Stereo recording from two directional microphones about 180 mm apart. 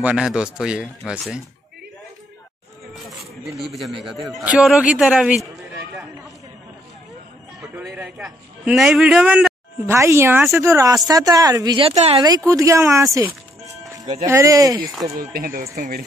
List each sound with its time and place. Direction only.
0.0 s speech: 5° right (ahead or behind)
3.7 s speech: centre (ahead or behind)
7.7 s a man's voice: 10° right (ahead or behind)
11.9 s speech: 35° right (ahead or behind)
12.4 s a man's voice: 15° right (ahead or behind)
13.8 s music: 20° right (ahead or behind)
14.2 s speech: 15° right (ahead or behind)
15.3 s speech: 55° right (ahead or behind)